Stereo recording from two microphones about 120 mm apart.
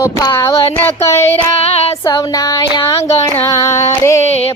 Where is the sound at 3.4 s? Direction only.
25° left (ahead or behind).